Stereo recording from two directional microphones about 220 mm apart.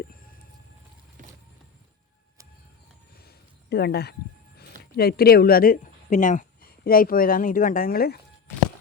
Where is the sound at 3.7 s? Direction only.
45° left (ahead or behind).